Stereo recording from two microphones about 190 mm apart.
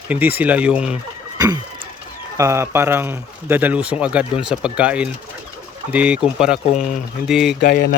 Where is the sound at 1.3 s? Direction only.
20° right (ahead or behind).